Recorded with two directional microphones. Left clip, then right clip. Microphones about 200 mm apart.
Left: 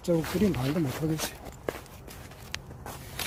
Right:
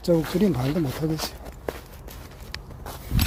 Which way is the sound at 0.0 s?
15° right (ahead or behind).